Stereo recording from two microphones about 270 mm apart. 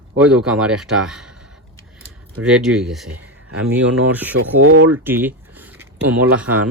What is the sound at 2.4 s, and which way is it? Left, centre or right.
Speech, centre.